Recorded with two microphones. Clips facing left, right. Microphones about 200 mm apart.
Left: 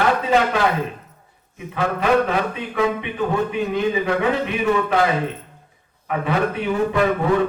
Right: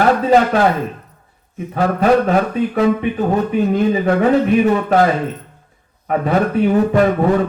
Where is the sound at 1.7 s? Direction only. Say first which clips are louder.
Right 5 dB; 40° right (ahead or behind).